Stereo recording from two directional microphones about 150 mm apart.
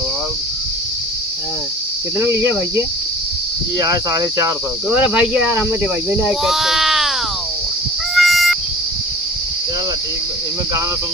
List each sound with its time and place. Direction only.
2.1 s speech: 15° right (ahead or behind)
3.8 s cricket: 25° right (ahead or behind)
4.9 s speech: 10° right (ahead or behind)
8.1 s a sound: centre (ahead or behind)